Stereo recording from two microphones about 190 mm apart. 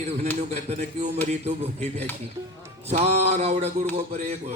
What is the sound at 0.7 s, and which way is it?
A man's voice, 35° right (ahead or behind).